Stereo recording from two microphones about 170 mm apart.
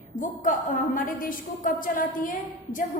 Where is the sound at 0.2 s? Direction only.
50° left (ahead or behind).